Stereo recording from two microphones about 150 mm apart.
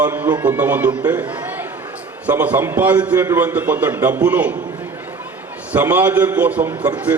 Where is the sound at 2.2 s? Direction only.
10° right (ahead or behind).